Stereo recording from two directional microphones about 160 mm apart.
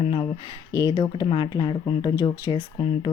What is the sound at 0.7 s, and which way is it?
Speech, 25° left (ahead or behind).